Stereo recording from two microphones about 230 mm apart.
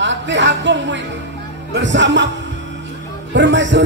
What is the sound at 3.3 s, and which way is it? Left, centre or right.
Speech, right.